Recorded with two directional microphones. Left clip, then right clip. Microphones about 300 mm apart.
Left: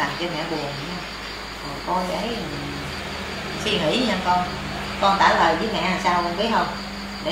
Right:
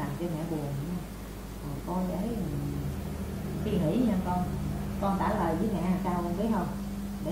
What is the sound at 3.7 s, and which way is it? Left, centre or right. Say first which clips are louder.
A woman's voice: left 9 dB; centre.